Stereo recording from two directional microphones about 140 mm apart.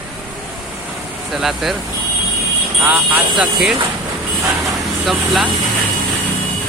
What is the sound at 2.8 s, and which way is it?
Speech, 10° right (ahead or behind).